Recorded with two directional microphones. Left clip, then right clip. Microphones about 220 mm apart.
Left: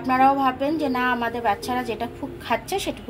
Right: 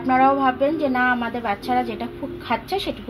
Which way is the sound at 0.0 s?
20° right (ahead or behind).